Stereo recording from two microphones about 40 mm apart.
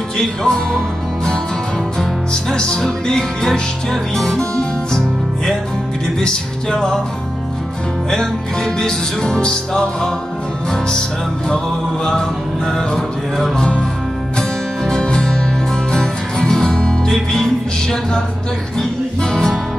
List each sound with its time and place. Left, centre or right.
0.2 s music: centre
4.4 s guitar: centre
6.1 s music: centre
8.7 s music: centre
13.6 s music: left
14.9 s music: centre